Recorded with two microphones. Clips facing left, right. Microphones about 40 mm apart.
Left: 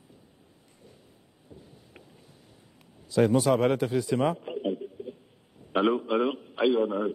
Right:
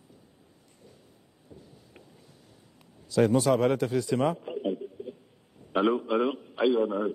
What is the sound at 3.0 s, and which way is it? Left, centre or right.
A man's voice, centre.